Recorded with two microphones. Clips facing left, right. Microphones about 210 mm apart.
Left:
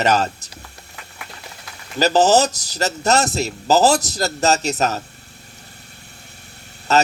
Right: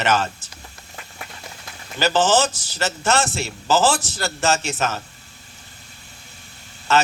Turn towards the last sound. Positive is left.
turn(degrees=40)  # may be behind; listen again after turning